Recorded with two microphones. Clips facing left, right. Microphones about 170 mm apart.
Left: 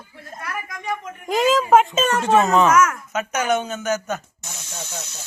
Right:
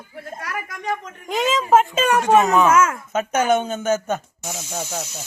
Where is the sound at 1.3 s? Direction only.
Centre (ahead or behind).